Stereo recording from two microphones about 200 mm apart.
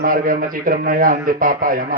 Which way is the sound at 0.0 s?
45° right (ahead or behind).